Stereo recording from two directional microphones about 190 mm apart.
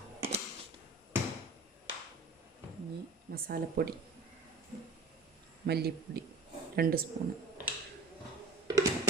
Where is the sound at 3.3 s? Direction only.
50° right (ahead or behind).